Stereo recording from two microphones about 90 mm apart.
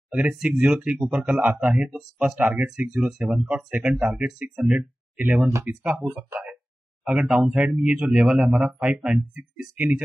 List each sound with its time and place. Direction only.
0.3 s speech: 15° right (ahead or behind)